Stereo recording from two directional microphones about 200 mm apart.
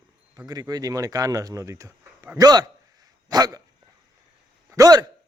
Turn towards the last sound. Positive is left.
turn(degrees=-15)  # may be behind; listen again after turning